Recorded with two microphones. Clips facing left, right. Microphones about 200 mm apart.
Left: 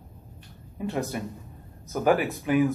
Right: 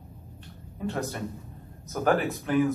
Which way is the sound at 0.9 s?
15° left (ahead or behind).